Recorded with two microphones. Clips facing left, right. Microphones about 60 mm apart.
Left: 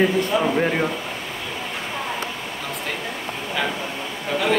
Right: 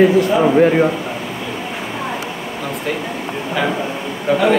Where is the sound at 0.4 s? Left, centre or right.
Centre.